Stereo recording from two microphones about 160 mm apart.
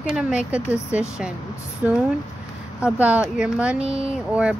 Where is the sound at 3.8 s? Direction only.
40° right (ahead or behind).